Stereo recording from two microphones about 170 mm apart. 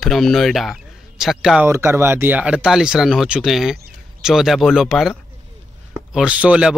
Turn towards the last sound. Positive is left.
turn(degrees=-5)  # may be behind; listen again after turning